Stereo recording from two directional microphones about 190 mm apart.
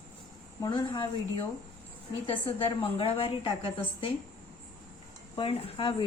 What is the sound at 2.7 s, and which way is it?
Speech, 30° left (ahead or behind).